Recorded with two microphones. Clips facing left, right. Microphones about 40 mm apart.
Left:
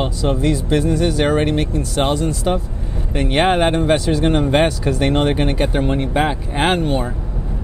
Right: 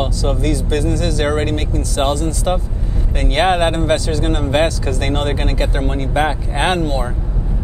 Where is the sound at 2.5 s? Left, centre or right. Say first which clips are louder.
Right 1 dB; centre.